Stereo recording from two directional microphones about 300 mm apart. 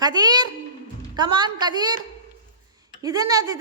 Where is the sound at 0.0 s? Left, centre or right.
Centre.